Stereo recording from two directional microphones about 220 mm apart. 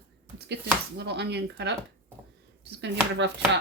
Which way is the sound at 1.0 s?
50° right (ahead or behind).